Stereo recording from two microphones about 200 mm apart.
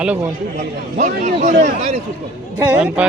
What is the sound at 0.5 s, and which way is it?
A man's voice, 40° right (ahead or behind).